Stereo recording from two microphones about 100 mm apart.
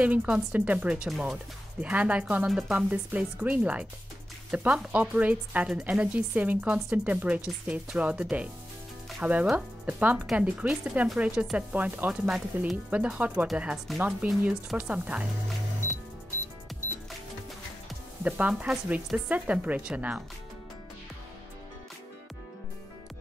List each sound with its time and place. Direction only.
0.0 s speech: 15° right (ahead or behind)
12.3 s speech: 5° right (ahead or behind)
12.9 s speech: 15° right (ahead or behind)
18.2 s speech: 15° right (ahead or behind)